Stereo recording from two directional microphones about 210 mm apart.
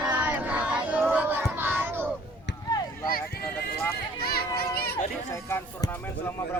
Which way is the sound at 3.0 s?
45° left (ahead or behind).